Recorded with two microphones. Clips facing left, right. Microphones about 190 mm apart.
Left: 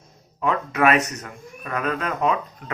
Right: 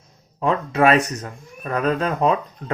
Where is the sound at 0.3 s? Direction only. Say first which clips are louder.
Right 3 dB; 30° right (ahead or behind).